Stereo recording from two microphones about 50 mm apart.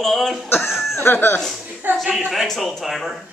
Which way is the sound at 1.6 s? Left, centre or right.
Right.